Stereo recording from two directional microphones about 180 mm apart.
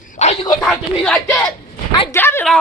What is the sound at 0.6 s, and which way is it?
Speech, 5° left (ahead or behind).